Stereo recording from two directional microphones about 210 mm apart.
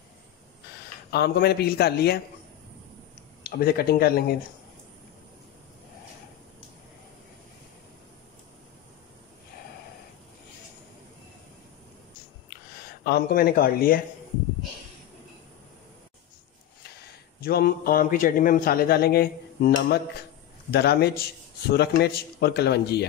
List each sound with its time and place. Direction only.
1.1 s speech: 50° left (ahead or behind)
3.4 s speech: 45° left (ahead or behind)
13.0 s speech: 45° left (ahead or behind)
17.4 s speech: 45° left (ahead or behind)